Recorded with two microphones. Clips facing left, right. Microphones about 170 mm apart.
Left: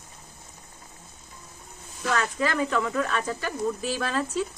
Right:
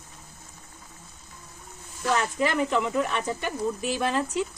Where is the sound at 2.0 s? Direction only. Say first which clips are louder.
Right 1 dB; 20° right (ahead or behind).